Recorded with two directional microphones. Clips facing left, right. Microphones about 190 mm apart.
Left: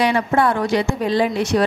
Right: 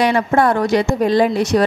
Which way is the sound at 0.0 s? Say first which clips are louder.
Right 2 dB; 45° right (ahead or behind).